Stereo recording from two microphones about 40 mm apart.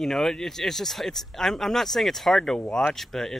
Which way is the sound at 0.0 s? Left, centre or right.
Centre.